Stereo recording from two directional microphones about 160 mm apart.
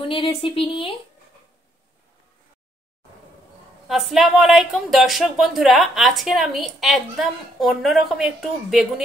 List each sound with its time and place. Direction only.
0.0 s speech: 35° left (ahead or behind)
3.8 s speech: centre (ahead or behind)